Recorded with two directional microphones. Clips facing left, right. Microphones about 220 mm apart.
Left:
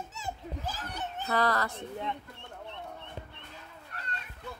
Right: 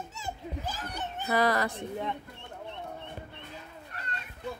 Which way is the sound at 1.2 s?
10° right (ahead or behind).